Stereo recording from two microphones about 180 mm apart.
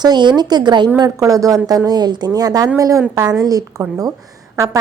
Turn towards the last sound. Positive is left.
turn(degrees=-20)  # may be behind; listen again after turning